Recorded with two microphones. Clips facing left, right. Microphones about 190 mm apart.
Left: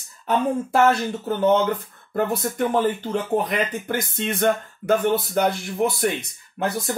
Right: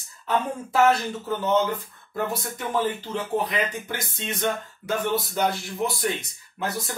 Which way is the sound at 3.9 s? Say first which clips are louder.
Left 7 dB; 55° left (ahead or behind).